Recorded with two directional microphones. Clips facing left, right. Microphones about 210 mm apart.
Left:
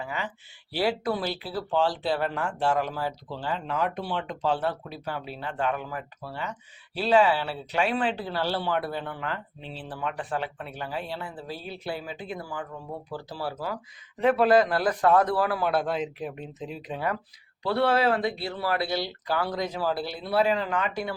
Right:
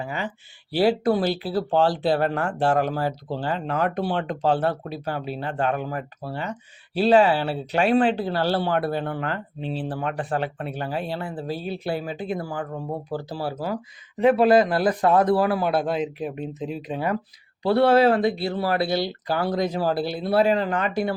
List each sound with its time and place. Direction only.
0.0 s speech: 40° right (ahead or behind)
1.3 s speech: 30° right (ahead or behind)
1.9 s speech: 55° right (ahead or behind); by 8.7 s 40° right (ahead or behind)
8.7 s speech: 65° right (ahead or behind); by 13.7 s 35° right (ahead or behind)
14.2 s speech: 15° right (ahead or behind)
15.8 s speech: 20° right (ahead or behind)
17.6 s speech: 40° right (ahead or behind)
19.5 s speech: 50° right (ahead or behind)
20.6 s speech: 45° right (ahead or behind)